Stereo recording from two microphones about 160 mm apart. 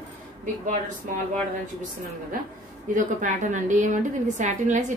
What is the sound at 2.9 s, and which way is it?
A woman's voice, 55° right (ahead or behind).